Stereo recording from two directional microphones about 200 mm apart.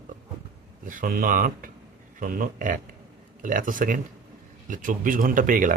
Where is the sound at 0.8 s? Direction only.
45° right (ahead or behind).